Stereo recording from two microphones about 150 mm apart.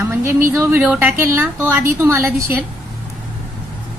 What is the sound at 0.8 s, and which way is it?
Speech, 5° right (ahead or behind).